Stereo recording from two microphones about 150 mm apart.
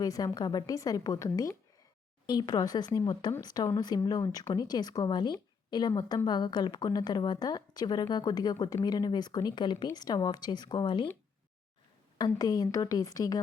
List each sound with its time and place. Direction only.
0.0 s a woman's voice: 25° left (ahead or behind)
12.1 s a woman's voice: 25° left (ahead or behind)